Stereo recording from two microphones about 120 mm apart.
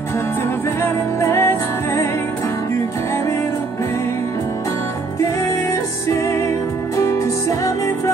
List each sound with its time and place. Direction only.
0.8 s music: 20° left (ahead or behind)
6.0 s music: 25° left (ahead or behind)